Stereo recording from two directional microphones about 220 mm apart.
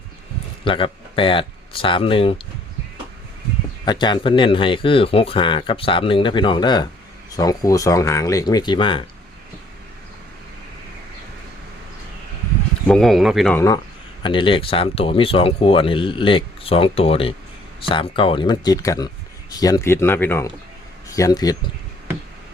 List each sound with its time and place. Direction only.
0.6 s speech: 25° left (ahead or behind)
3.8 s speech: 20° left (ahead or behind)
12.9 s speech: centre (ahead or behind)
14.2 s speech: 20° left (ahead or behind)